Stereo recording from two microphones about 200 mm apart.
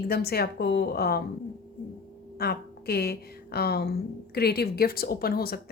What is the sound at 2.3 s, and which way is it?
A woman's voice, 50° left (ahead or behind).